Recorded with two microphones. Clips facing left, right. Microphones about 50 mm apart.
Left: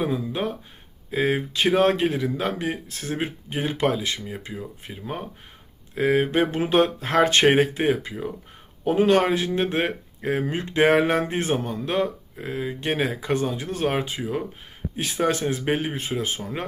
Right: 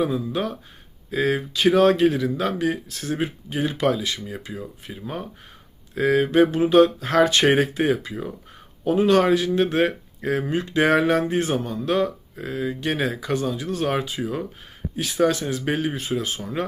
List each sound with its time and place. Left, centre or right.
0.0 s speech: left
9.7 s speech: left